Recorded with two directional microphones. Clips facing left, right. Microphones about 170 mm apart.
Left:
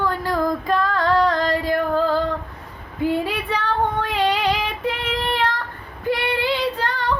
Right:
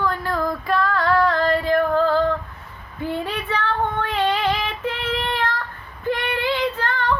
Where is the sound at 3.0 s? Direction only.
10° left (ahead or behind).